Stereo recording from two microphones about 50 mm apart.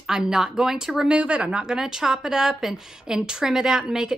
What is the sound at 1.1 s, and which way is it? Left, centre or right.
A woman's voice, right.